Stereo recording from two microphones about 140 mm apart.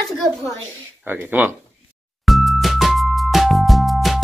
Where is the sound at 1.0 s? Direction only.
15° right (ahead or behind).